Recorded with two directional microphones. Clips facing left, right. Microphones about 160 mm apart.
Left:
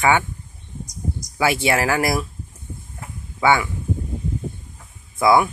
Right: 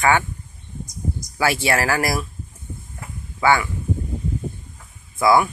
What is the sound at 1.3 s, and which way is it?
Speech, 15° left (ahead or behind).